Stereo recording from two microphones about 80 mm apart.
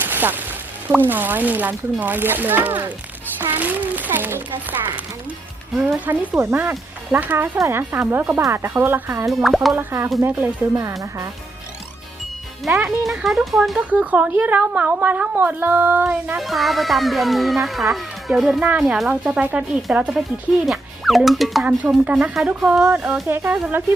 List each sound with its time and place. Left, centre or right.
0.0 s a sound: right
0.9 s a woman's voice: right
6.1 s a woman's voice: right
9.3 s speech: centre
9.7 s a woman's voice: right
12.8 s speech: centre
13.7 s a woman's voice: centre
16.4 s speech: centre
21.6 s a woman's voice: centre